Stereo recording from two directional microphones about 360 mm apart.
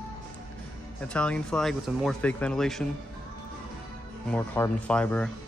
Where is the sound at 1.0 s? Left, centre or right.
Centre.